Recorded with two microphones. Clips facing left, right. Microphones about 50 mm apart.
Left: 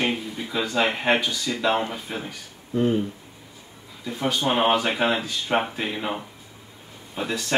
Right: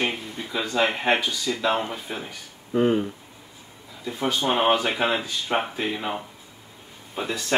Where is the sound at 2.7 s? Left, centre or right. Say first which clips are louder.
Right 1 dB; right.